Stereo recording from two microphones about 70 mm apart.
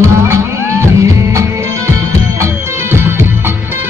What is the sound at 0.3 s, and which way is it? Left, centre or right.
Music, right.